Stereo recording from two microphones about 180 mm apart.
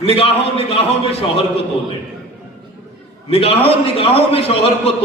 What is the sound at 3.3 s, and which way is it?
A man's voice, 30° left (ahead or behind).